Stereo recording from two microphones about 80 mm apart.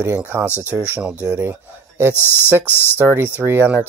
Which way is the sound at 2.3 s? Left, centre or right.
Left.